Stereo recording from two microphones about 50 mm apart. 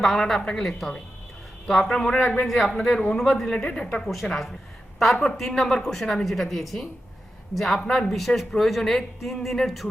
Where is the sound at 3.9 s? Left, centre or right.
Centre.